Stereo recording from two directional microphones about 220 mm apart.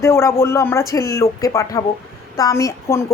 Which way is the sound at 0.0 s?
10° left (ahead or behind).